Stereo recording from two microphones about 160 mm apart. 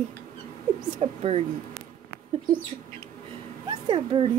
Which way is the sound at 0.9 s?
40° right (ahead or behind).